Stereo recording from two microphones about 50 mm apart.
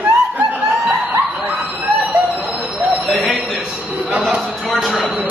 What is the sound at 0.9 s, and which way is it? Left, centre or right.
Chuckle, right.